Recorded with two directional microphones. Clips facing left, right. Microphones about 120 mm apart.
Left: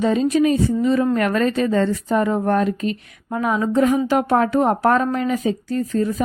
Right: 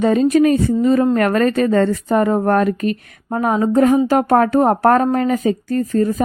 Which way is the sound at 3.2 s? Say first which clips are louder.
Right 4 dB; 40° right (ahead or behind).